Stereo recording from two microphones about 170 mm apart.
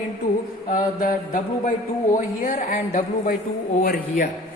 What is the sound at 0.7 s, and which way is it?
Speech, 55° left (ahead or behind).